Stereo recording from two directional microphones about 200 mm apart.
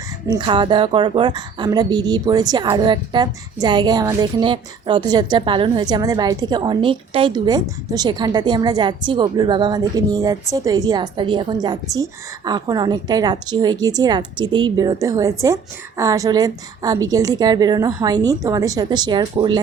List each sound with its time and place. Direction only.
0.3 s a woman's voice: 25° right (ahead or behind)